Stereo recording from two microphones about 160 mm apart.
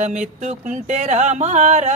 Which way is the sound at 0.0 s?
45° right (ahead or behind).